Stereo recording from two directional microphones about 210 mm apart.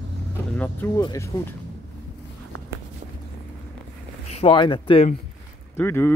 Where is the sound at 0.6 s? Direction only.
10° left (ahead or behind).